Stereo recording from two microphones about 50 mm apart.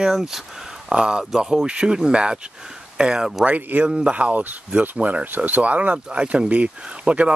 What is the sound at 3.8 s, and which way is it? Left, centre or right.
Speech, centre.